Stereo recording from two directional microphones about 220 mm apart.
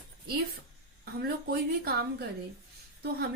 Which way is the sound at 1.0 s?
45° right (ahead or behind).